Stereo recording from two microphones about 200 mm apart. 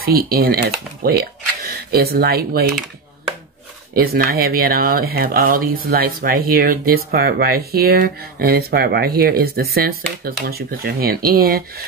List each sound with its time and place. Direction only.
0.0 s speech: 50° right (ahead or behind)
3.9 s speech: 50° right (ahead or behind)